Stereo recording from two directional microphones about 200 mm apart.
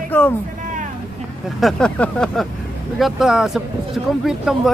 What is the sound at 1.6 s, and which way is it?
Speech, 5° left (ahead or behind).